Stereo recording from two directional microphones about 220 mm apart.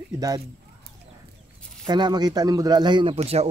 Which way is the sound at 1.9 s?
20° right (ahead or behind).